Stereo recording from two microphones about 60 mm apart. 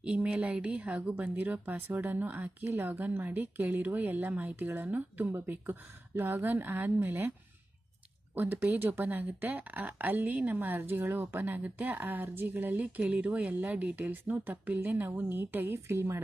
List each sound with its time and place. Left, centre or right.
0.0 s speech: right
8.4 s speech: right
15.9 s speech: right